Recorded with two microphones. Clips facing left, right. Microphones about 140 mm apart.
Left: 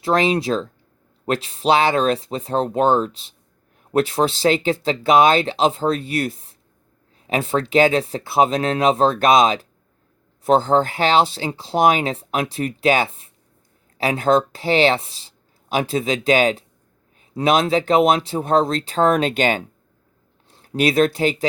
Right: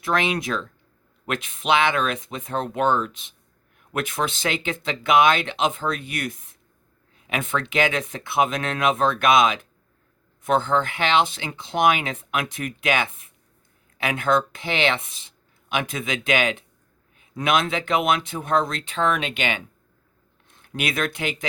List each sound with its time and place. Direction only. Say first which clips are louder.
0.0 s speech: left 6 dB; 30° left (ahead or behind)